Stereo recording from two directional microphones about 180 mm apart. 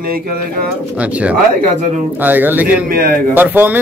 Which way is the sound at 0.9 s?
5° right (ahead or behind).